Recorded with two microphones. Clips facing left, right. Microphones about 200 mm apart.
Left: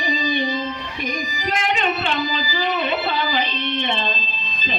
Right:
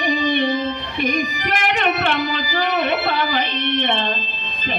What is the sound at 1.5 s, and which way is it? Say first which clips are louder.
Music: even; 65° right (ahead or behind).